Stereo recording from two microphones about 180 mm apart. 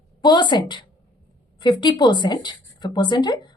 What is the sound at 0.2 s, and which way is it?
A woman's voice, 25° left (ahead or behind).